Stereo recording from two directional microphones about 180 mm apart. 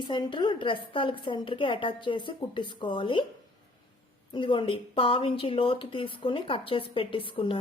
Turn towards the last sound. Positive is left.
turn(degrees=30)  # may be behind; listen again after turning